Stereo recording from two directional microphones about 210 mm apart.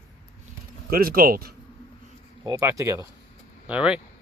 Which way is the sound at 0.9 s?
45° right (ahead or behind).